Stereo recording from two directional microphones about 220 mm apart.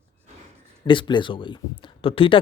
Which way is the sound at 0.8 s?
20° left (ahead or behind).